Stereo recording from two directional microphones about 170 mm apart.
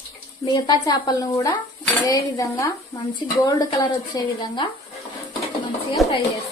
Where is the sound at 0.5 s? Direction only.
25° left (ahead or behind).